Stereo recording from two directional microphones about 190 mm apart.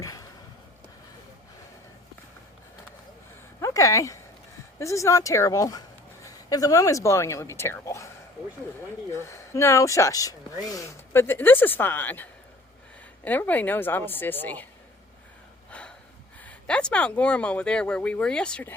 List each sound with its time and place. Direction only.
0.0 s a sound: 20° left (ahead or behind)
3.6 s speech: 15° left (ahead or behind)
9.1 s speech: 15° left (ahead or behind)
15.7 s gasp: 5° left (ahead or behind)
16.4 s speech: 5° left (ahead or behind)